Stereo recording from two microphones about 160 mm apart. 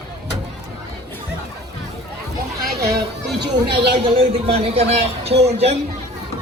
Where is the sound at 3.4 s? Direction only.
30° right (ahead or behind).